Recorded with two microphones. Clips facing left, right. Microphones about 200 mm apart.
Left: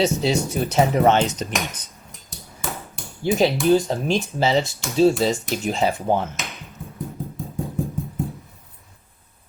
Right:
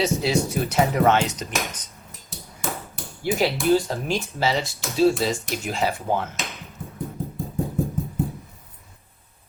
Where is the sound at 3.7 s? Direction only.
30° left (ahead or behind).